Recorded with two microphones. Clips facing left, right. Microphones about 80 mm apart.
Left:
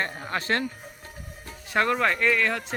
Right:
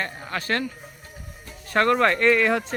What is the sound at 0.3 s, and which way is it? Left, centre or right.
Speech, left.